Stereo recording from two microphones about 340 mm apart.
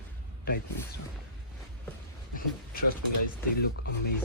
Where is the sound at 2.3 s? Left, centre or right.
Left.